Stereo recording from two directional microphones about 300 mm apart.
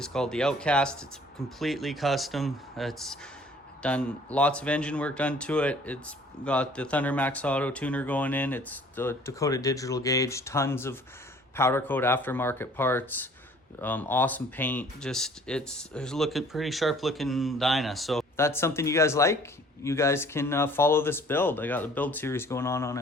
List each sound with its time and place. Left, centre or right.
0.0 s speech: centre